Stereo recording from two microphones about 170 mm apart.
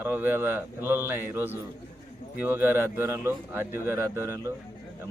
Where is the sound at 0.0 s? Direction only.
10° right (ahead or behind).